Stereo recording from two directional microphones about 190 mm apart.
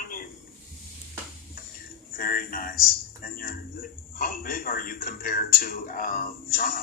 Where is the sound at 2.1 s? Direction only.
50° left (ahead or behind).